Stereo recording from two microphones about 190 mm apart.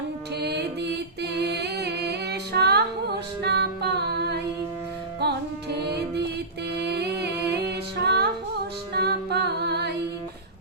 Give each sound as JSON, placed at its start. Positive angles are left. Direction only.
{"t": 0.3, "sound": "music", "side_deg": -60}
{"t": 1.2, "sound": "female singing", "side_deg": -60}
{"t": 3.4, "sound": "music", "side_deg": -60}